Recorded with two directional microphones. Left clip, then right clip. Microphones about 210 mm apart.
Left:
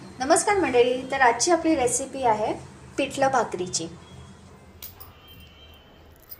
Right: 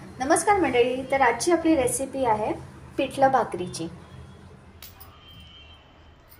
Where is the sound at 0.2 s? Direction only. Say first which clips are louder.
Even; 5° right (ahead or behind).